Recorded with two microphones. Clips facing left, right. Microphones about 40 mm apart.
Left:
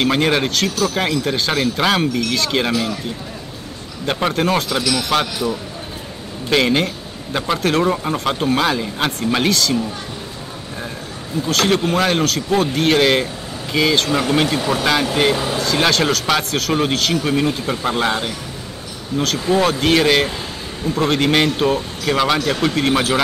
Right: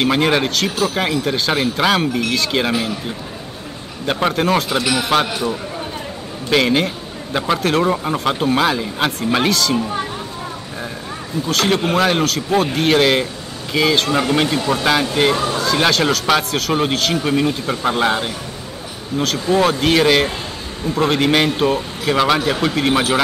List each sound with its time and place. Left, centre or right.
0.0 s speech: centre
0.7 s speech: centre
0.9 s speech: centre
2.0 s speech: centre
2.3 s speech: centre
4.0 s speech: centre
4.8 s speech: right
6.5 s speech: centre
11.4 s speech: centre